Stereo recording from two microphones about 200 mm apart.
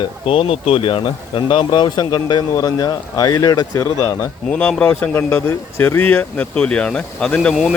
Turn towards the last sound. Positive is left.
turn(degrees=0)  # may be behind; listen again after turning